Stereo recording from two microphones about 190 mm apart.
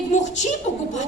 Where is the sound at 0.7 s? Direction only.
35° left (ahead or behind).